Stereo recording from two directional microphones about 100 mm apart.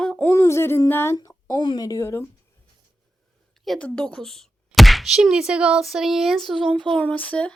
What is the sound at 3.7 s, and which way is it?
A woman's voice, 15° left (ahead or behind).